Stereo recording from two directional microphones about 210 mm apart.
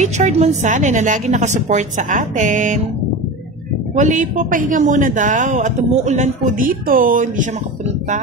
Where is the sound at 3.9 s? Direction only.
35° right (ahead or behind).